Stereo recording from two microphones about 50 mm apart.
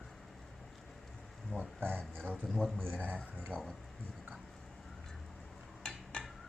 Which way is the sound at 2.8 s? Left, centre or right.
Right.